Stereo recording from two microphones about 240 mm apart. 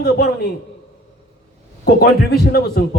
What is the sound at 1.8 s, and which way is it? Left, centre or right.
A man's voice, left.